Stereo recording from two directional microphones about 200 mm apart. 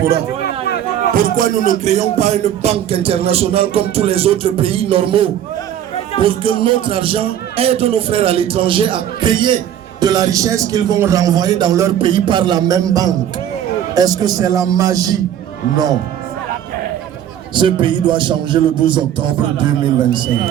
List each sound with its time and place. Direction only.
1.1 s music: 45° right (ahead or behind); by 9.6 s 25° right (ahead or behind)
10.0 s a man's voice: 20° right (ahead or behind)
11.9 s music: 25° right (ahead or behind)
17.5 s music: 25° right (ahead or behind)